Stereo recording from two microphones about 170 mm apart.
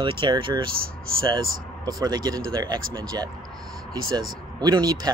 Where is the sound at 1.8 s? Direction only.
25° right (ahead or behind).